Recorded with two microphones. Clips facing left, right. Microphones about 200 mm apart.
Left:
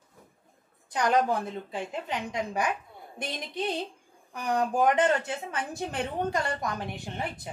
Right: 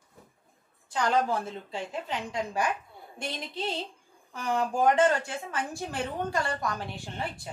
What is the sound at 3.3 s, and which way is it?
A woman's voice, 15° left (ahead or behind).